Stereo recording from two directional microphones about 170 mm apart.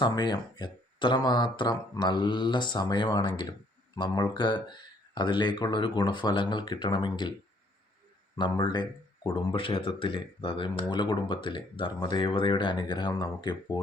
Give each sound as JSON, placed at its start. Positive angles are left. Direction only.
{"t": 0.0, "sound": "speech", "side_deg": 25}
{"t": 8.4, "sound": "speech", "side_deg": 25}